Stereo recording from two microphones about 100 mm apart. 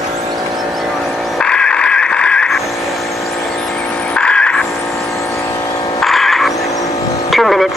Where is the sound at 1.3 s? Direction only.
10° left (ahead or behind).